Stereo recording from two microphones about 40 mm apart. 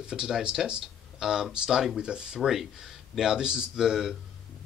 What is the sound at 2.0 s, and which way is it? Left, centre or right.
Speech, centre.